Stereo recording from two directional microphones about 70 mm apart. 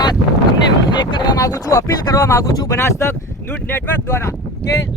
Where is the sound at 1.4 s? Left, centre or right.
Left.